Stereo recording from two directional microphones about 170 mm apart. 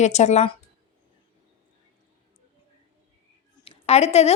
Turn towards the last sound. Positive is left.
turn(degrees=40)  # may be behind; listen again after turning